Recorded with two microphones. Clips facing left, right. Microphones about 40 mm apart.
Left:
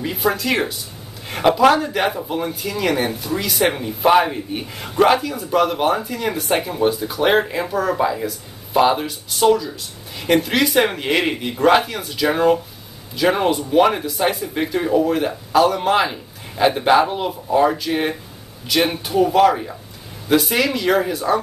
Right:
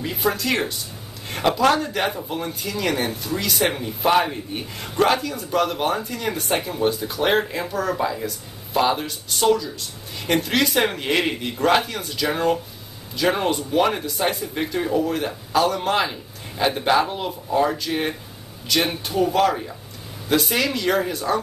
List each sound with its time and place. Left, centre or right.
0.0 s speech: centre